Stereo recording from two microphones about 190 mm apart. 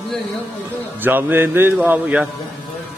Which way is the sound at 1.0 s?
10° right (ahead or behind).